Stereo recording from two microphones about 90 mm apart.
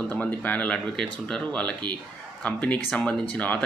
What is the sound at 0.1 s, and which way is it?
Speech, 15° left (ahead or behind).